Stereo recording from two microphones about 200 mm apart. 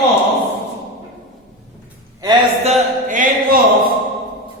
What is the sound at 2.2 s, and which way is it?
A man's voice, 30° right (ahead or behind).